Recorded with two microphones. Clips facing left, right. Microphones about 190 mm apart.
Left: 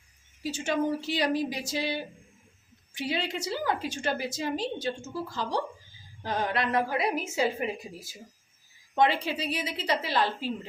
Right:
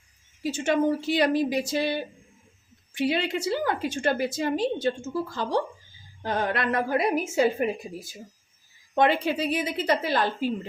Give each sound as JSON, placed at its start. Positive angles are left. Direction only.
{"t": 0.5, "sound": "a woman's voice", "side_deg": -55}